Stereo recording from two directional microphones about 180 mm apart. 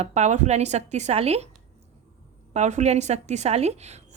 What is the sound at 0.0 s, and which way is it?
A woman's voice, 40° right (ahead or behind).